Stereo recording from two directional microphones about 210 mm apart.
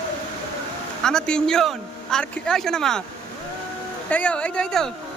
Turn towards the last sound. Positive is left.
turn(degrees=5)  # may be behind; listen again after turning